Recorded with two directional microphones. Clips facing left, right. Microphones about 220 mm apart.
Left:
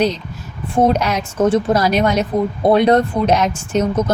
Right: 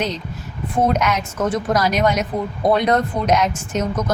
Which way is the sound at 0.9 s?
30° left (ahead or behind).